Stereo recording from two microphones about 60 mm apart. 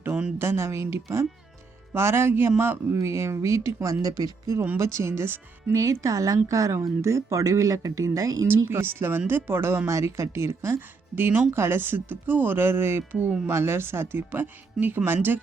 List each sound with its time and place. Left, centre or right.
0.3 s speech: right
1.9 s speech: right
4.0 s speech: right
4.8 s speech: right
5.7 s speech: right
8.6 s speech: right